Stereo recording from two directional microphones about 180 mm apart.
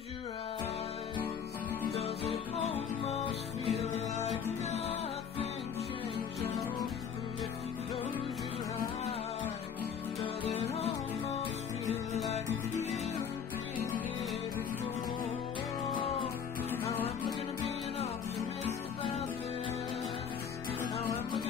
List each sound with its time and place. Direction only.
1.9 s music: 35° left (ahead or behind)
10.2 s music: 30° left (ahead or behind)
16.0 s music: 30° left (ahead or behind)